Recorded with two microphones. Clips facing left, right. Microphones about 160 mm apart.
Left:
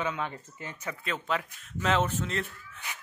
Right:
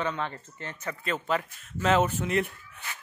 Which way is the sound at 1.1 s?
Centre (ahead or behind).